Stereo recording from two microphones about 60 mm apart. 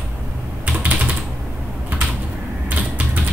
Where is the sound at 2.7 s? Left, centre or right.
Right.